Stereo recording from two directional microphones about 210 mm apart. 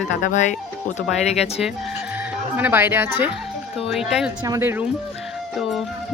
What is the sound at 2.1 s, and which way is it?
Speech, 10° right (ahead or behind).